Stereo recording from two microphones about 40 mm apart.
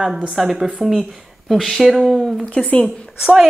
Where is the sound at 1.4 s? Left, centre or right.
Centre.